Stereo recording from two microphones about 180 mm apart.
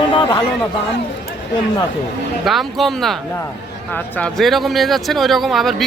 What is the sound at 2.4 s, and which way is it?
Speech, centre (ahead or behind).